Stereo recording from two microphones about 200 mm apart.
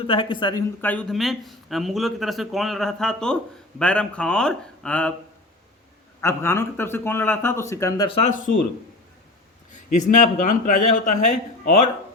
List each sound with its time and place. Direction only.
0.1 s speech: 25° left (ahead or behind)
0.8 s speech: 5° left (ahead or behind)
6.2 s speech: 10° left (ahead or behind)
8.1 s a man's voice: 35° left (ahead or behind)
9.7 s a man's voice: 40° left (ahead or behind)